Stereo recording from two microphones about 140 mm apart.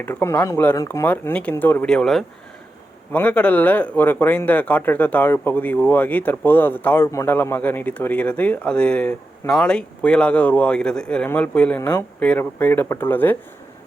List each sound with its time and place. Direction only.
0.0 s speech: 15° left (ahead or behind)
11.8 s speech: 20° left (ahead or behind)